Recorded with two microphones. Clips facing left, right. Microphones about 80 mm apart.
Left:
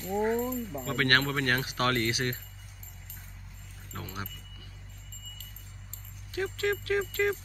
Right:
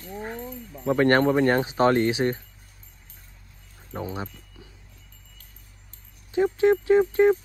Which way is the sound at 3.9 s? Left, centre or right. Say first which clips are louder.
Right 8 dB; right.